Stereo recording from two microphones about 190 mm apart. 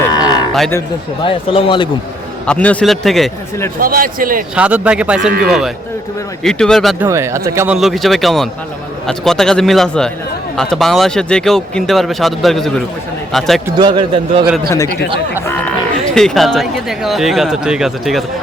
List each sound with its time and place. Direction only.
0.1 s cattle: 20° left (ahead or behind)
1.2 s speech: 30° left (ahead or behind)
2.5 s speech: 5° left (ahead or behind)
3.8 s a man's voice: 50° right (ahead or behind)
4.5 s speech: 5° right (ahead or behind)
7.0 s speech: 15° right (ahead or behind)
7.8 s speech: centre (ahead or behind)
13.7 s a man's voice: 25° right (ahead or behind)
16.1 s speech: centre (ahead or behind)